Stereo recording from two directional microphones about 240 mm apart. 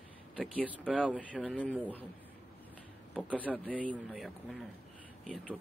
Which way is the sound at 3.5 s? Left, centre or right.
Centre.